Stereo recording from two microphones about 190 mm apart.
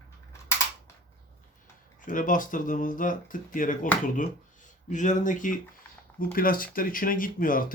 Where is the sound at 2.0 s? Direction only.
45° left (ahead or behind).